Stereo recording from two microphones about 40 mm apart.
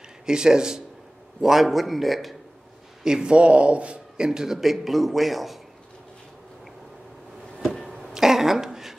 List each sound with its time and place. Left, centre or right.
0.3 s speech: centre
1.4 s a man's voice: centre
3.0 s a man's voice: centre
4.6 s a man's voice: centre
8.1 s a sound: centre